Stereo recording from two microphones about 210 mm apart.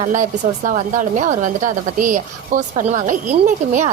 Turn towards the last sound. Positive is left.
turn(degrees=-35)  # may be behind; listen again after turning